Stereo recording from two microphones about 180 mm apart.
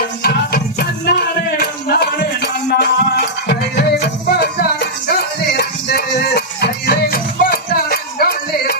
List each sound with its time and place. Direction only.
0.2 s music: 55° left (ahead or behind)